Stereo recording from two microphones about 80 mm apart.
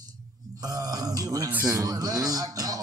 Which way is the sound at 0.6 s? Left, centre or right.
Right.